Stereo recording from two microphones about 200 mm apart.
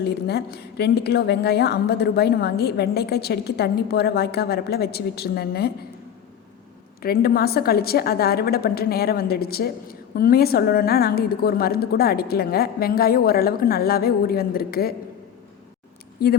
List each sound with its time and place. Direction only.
0.0 s a woman's voice: 55° left (ahead or behind)
7.0 s a woman's voice: 50° left (ahead or behind)
16.2 s a woman's voice: 50° left (ahead or behind)